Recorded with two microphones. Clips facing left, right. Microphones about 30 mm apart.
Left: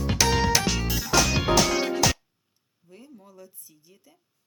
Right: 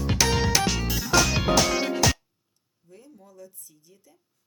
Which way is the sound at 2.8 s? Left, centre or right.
Left.